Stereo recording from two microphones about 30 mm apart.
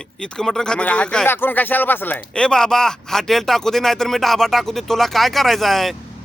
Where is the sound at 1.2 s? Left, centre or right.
Left.